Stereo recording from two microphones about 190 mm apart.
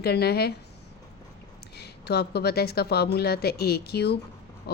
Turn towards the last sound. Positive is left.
turn(degrees=60)  # may be behind; listen again after turning